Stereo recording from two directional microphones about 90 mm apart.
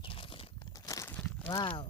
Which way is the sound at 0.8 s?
40° left (ahead or behind).